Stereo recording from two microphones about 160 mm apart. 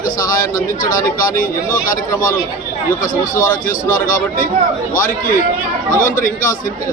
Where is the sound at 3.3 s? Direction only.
55° left (ahead or behind).